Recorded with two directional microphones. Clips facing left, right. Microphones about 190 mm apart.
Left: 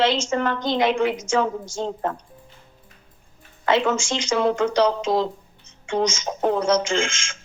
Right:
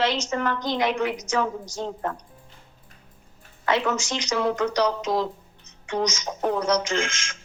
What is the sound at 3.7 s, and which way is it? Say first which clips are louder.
A woman's voice: left 4 dB; 25° left (ahead or behind).